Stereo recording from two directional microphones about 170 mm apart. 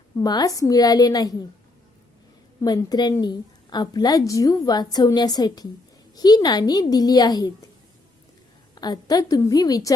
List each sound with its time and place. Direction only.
0.2 s a woman's voice: 20° left (ahead or behind)
2.6 s a woman's voice: 20° left (ahead or behind)
8.7 s a woman's voice: 25° left (ahead or behind)